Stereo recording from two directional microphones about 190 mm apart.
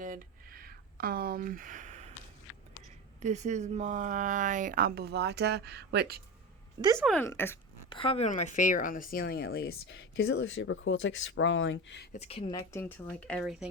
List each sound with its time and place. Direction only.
0.0 s a sound: 50° right (ahead or behind)
3.2 s speech: 40° right (ahead or behind); by 6.1 s 60° right (ahead or behind)
7.0 s speech: 5° left (ahead or behind)
7.9 s speech: 30° left (ahead or behind)
8.3 s speech: 40° left (ahead or behind); by 12.0 s 75° left (ahead or behind)
12.1 s speech: 35° left (ahead or behind)
12.8 s speech: 5° left (ahead or behind)